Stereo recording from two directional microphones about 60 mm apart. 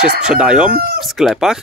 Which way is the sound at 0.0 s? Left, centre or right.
Centre.